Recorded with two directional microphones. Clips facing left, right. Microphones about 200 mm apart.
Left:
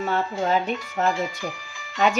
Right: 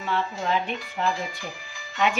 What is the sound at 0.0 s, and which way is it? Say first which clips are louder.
Speech: left 4 dB; 45° left (ahead or behind).